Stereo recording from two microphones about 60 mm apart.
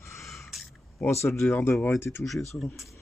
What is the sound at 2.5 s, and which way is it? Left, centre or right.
Speech, left.